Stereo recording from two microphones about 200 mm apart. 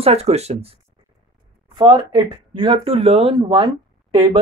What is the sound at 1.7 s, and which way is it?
Speech, 20° right (ahead or behind).